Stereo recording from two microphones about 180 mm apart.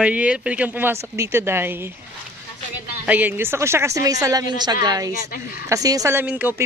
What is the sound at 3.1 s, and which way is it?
A woman's voice, 10° right (ahead or behind).